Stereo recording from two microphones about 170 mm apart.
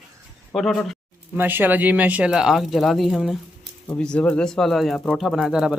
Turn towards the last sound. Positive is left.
turn(degrees=-5)  # may be behind; listen again after turning